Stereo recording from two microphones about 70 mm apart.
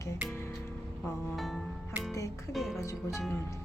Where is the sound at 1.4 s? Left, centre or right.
Centre.